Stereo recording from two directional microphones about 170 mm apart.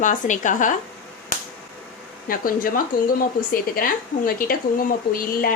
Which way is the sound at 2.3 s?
55° left (ahead or behind).